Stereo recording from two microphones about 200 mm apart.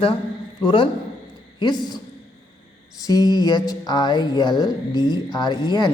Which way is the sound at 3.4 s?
20° left (ahead or behind).